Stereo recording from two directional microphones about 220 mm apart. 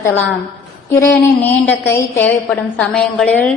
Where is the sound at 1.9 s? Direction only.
10° left (ahead or behind).